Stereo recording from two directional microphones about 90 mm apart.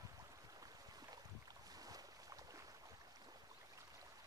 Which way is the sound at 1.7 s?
45° right (ahead or behind).